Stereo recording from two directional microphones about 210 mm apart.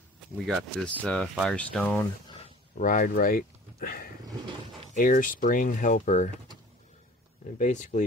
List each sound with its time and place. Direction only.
0.5 s speech: centre (ahead or behind)
2.8 s speech: 40° left (ahead or behind)
7.5 s speech: 35° left (ahead or behind)